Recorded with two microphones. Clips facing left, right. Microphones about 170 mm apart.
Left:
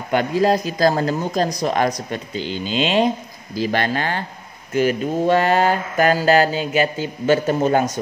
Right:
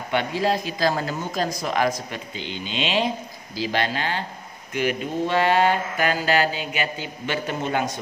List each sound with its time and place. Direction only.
0.1 s mantra: 45° left (ahead or behind)
3.5 s speech: 50° left (ahead or behind)
4.7 s mantra: 40° left (ahead or behind)